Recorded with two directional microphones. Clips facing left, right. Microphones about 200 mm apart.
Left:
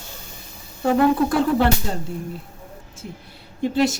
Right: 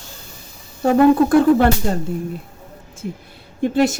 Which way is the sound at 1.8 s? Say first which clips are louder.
Right 6 dB; 50° right (ahead or behind).